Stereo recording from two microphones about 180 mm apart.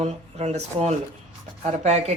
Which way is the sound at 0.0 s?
35° right (ahead or behind).